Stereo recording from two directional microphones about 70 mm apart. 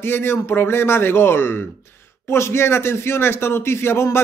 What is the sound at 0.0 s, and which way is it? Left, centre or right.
Speech, left.